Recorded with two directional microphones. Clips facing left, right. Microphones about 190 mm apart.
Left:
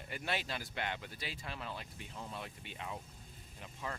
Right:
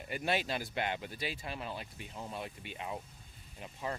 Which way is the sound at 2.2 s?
20° right (ahead or behind).